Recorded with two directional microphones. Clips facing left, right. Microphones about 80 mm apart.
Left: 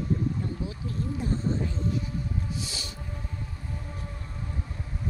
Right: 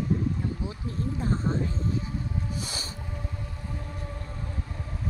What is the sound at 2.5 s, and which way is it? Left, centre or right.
Music, right.